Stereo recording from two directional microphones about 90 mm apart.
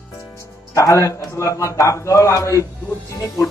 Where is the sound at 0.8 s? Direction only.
35° left (ahead or behind).